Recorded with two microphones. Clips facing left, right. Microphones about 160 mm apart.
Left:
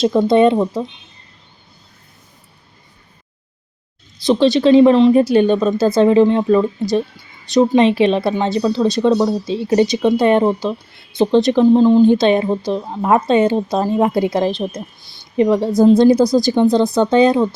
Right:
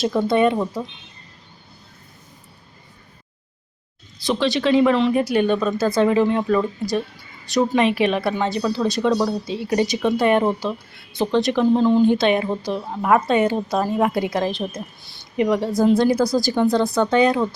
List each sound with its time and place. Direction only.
0.0 s speech: 20° left (ahead or behind)
4.3 s speech: 25° left (ahead or behind)